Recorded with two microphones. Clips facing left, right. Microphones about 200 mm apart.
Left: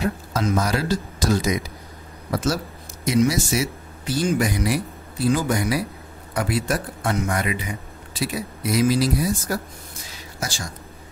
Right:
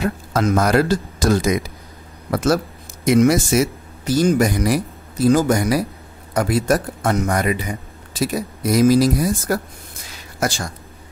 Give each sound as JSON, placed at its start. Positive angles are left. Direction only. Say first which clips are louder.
{"t": 0.0, "sound": "speech", "louder": "right 4 dB", "side_deg": -60}